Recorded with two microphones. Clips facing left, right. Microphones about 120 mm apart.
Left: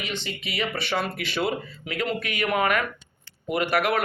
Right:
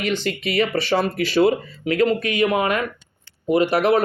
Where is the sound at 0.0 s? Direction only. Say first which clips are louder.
Right 10 dB; 50° right (ahead or behind).